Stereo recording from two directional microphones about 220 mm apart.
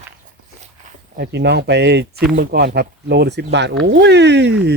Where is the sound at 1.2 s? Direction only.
50° right (ahead or behind).